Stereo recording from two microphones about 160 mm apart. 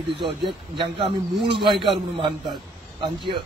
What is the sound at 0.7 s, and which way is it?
Speech, 30° right (ahead or behind).